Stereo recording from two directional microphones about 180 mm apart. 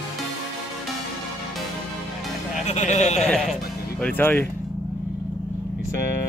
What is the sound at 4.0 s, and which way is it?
Music, 10° left (ahead or behind).